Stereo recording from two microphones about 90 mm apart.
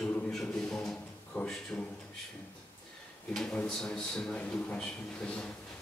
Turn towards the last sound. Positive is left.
turn(degrees=10)  # may be behind; listen again after turning